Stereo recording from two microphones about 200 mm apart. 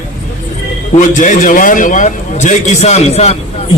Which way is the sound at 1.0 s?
40° left (ahead or behind).